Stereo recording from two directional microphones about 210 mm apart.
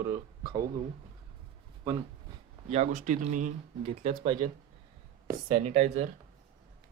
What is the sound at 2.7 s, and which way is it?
Speech, 30° right (ahead or behind).